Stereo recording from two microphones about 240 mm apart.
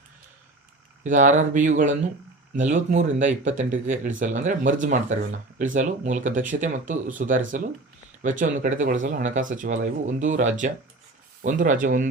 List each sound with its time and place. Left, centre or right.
1.0 s speech: right